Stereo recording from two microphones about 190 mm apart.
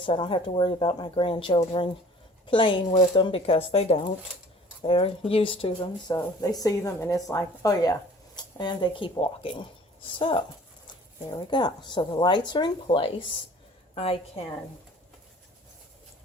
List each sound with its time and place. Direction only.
0.0 s a woman's voice: 25° left (ahead or behind)